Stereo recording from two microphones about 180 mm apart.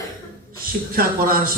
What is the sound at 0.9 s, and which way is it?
Speech, 50° right (ahead or behind).